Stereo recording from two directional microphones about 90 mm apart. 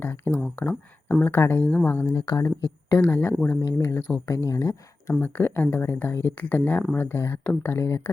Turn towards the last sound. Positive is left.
turn(degrees=25)  # may be behind; listen again after turning